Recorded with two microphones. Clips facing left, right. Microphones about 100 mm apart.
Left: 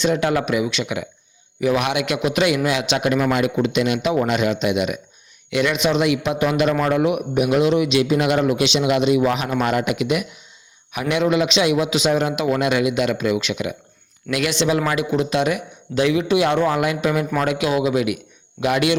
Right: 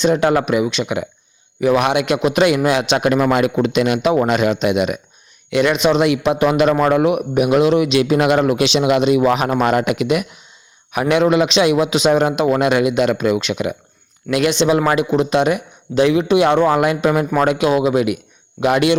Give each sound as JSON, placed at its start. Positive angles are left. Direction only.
{"t": 0.1, "sound": "speech", "side_deg": -40}
{"t": 3.3, "sound": "a man's voice", "side_deg": -55}
{"t": 8.6, "sound": "a man's voice", "side_deg": -40}
{"t": 14.3, "sound": "speech", "side_deg": -30}
{"t": 16.6, "sound": "speech", "side_deg": -40}